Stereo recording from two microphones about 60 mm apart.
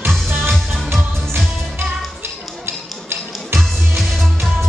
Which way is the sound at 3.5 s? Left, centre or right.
Centre.